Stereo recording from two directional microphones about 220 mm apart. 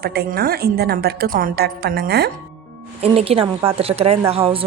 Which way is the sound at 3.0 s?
25° right (ahead or behind).